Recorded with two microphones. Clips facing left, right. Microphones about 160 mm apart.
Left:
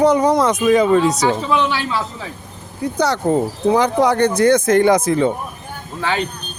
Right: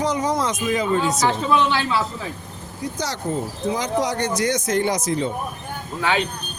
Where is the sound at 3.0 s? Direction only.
60° left (ahead or behind).